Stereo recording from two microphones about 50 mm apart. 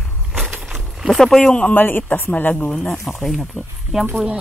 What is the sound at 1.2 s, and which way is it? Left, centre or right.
Speech, centre.